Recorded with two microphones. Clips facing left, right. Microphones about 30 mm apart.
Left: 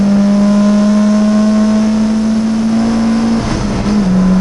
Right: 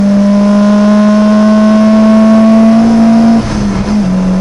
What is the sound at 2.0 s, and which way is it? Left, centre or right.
Vehicle, right.